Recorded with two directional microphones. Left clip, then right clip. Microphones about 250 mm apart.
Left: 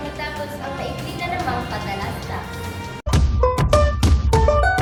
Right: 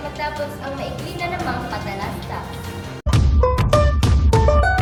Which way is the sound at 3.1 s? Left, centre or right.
Centre.